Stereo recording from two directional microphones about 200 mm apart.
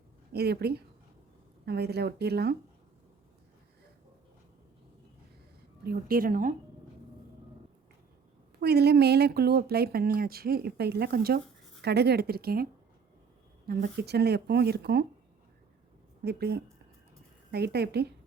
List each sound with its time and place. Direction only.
0.3 s speech: 55° right (ahead or behind)
5.8 s speech: 50° right (ahead or behind)
8.6 s speech: 55° right (ahead or behind)
13.7 s speech: 55° right (ahead or behind)
16.2 s speech: 55° right (ahead or behind)